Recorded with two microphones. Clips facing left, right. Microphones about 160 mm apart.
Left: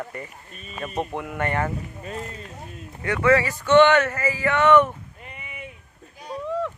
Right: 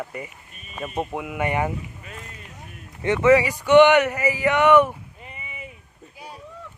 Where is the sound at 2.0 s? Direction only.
35° left (ahead or behind).